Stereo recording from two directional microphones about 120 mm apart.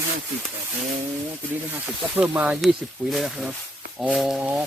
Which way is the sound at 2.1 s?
15° right (ahead or behind).